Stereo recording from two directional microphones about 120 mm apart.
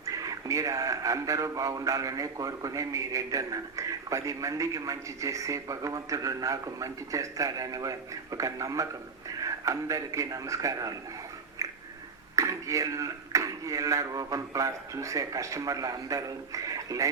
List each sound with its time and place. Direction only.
0.0 s a man's voice: 30° right (ahead or behind)
11.6 s a sound: 25° right (ahead or behind)
12.4 s a man's voice: 25° right (ahead or behind)